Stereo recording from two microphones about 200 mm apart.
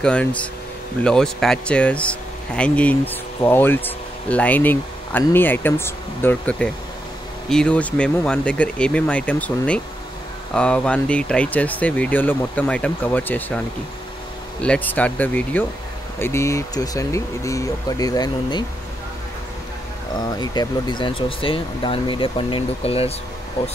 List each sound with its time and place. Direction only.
0.0 s speech: 5° left (ahead or behind)
14.6 s speech: 5° left (ahead or behind)
20.2 s speech: 20° left (ahead or behind)